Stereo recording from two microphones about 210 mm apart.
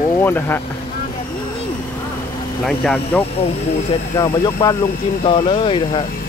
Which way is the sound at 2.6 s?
5° left (ahead or behind).